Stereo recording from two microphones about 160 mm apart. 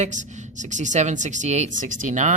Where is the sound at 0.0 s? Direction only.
50° right (ahead or behind).